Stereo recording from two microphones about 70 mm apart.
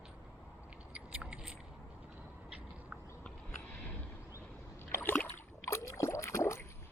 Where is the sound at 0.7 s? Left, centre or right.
Centre.